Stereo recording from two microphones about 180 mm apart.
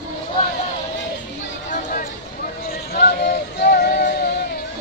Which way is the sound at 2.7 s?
60° left (ahead or behind).